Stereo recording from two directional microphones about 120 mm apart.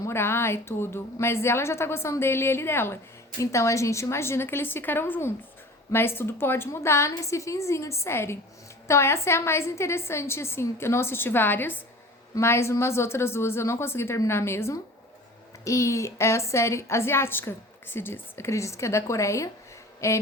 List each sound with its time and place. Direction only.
0.0 s a woman's voice: 20° left (ahead or behind)